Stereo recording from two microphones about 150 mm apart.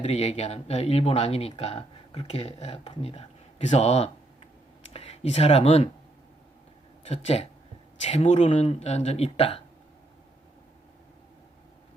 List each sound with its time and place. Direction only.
0.0 s speech: 45° left (ahead or behind)
7.1 s speech: 45° left (ahead or behind)